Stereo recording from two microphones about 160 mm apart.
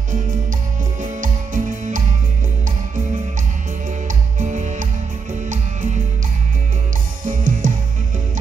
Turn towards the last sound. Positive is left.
turn(degrees=-55)  # may be behind; listen again after turning